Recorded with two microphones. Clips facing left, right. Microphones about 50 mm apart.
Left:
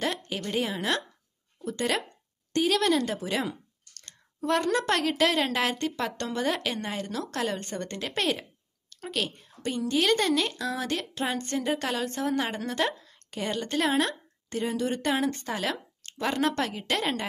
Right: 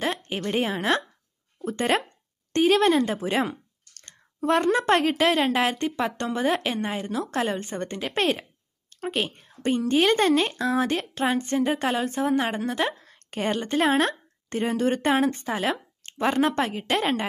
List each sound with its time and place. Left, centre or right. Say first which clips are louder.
0.0 s a woman's voice: right 3 dB; right
13.0 s a sound: right 5 dB; right
13.7 s a woman's voice: right 4 dB; right
15.0 s a woman's voice: right 5 dB; right
15.3 s a woman's voice: right 4 dB; centre